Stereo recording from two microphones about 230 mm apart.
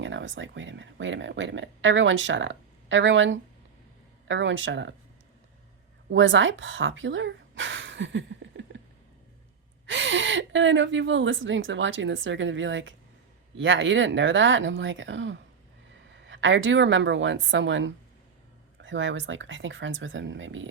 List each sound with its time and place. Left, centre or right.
0.0 s speech: right
6.1 s speech: right
9.8 s a woman's voice: right